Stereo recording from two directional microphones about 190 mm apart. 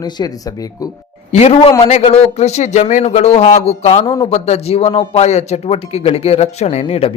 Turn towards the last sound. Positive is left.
turn(degrees=30)  # may be behind; listen again after turning